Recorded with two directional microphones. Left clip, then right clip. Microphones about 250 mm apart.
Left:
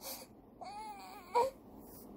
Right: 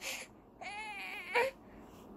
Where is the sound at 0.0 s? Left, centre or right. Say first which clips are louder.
Right 6 dB; centre.